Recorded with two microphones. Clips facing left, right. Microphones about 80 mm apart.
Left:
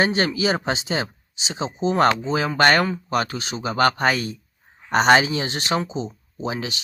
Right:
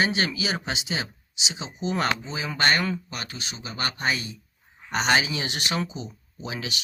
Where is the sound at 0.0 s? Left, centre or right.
Left.